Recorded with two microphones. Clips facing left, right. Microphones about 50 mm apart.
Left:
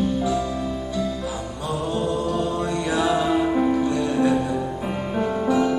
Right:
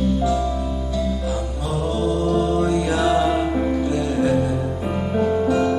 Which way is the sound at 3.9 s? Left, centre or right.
Left.